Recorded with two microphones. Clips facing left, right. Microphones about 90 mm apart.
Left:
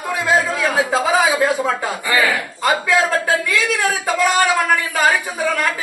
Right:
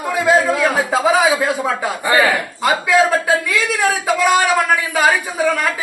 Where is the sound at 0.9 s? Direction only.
5° right (ahead or behind).